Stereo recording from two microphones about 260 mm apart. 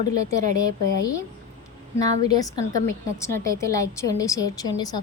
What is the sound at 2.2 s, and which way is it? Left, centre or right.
A woman's voice, centre.